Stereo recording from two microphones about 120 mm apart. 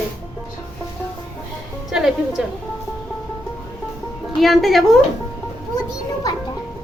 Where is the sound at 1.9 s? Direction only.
5° right (ahead or behind).